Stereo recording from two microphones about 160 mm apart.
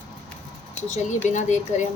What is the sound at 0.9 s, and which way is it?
Speech, 50° left (ahead or behind).